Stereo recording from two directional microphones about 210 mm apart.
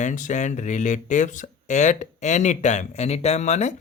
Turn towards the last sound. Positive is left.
turn(degrees=30)  # may be behind; listen again after turning